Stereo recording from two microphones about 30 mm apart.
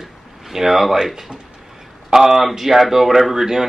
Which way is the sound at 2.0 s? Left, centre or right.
Centre.